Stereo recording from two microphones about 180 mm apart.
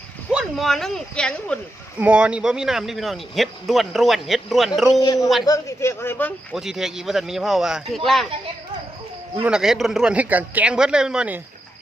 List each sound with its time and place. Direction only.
0.3 s speech: centre (ahead or behind)
2.0 s speech: 5° right (ahead or behind)
4.9 s a man's voice: 20° left (ahead or behind)
6.5 s speech: centre (ahead or behind)
9.4 s speech: 5° right (ahead or behind)